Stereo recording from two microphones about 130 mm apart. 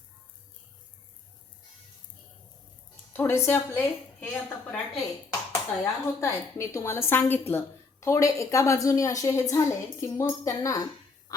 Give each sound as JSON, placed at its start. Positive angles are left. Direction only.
{"t": 3.1, "sound": "a woman's voice", "side_deg": 20}